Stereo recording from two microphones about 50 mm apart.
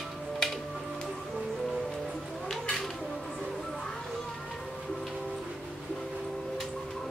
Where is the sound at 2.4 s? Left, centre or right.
Centre.